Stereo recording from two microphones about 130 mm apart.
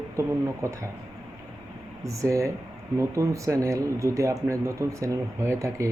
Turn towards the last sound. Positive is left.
turn(degrees=-20)  # may be behind; listen again after turning